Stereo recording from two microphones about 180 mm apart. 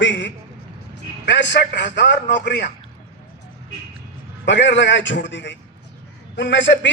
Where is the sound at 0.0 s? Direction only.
90° left.